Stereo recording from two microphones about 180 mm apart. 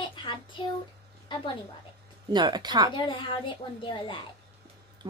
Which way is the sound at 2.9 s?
25° left (ahead or behind).